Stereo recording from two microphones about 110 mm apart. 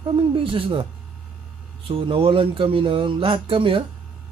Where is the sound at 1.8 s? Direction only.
55° right (ahead or behind).